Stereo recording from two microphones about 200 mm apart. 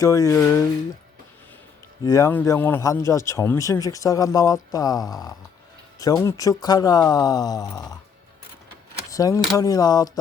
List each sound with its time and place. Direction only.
0.0 s speech: 15° left (ahead or behind)
2.0 s speech: 15° left (ahead or behind)
9.0 s a sound: 15° left (ahead or behind)
9.6 s speech: 15° left (ahead or behind)